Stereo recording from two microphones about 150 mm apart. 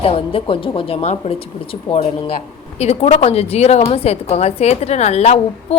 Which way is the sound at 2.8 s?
45° left (ahead or behind).